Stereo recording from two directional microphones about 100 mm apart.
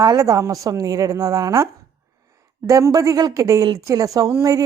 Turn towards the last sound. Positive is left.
turn(degrees=-35)  # may be behind; listen again after turning